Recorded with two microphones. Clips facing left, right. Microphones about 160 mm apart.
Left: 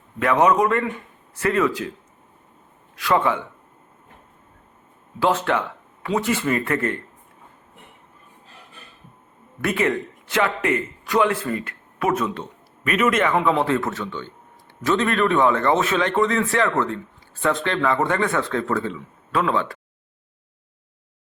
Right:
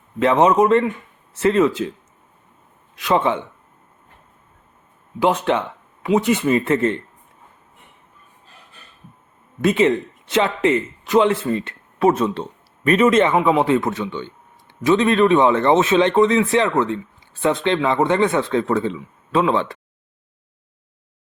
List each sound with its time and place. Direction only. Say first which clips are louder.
0.2 s speech: right 3 dB; 25° right (ahead or behind)
2.9 s speech: right 2 dB; 20° right (ahead or behind)
5.2 s speech: right 2 dB; 15° right (ahead or behind)
9.6 s a man's voice: right 6 dB; 20° right (ahead or behind)